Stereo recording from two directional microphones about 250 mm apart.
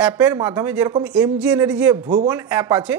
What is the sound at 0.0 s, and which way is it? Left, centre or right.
A woman's voice, centre.